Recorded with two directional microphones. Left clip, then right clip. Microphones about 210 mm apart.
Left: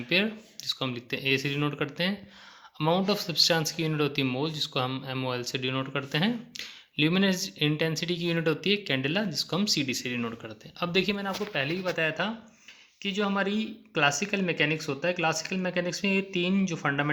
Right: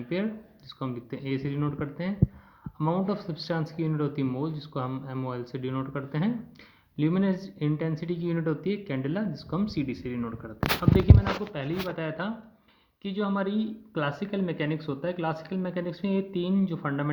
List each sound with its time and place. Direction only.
0.1 s speech: 30° left (ahead or behind)
11.5 s speech: 25° left (ahead or behind)